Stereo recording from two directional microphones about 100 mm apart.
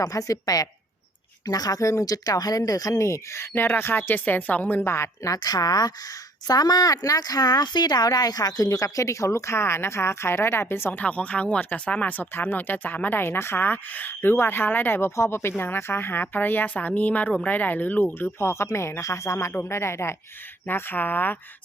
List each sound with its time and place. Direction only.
0.0 s speech: 35° left (ahead or behind); by 21.3 s 20° left (ahead or behind)